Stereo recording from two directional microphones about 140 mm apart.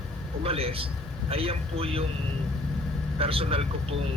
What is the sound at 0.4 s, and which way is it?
Speech, 45° right (ahead or behind).